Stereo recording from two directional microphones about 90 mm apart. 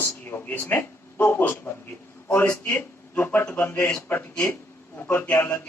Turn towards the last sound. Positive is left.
turn(degrees=25)  # may be behind; listen again after turning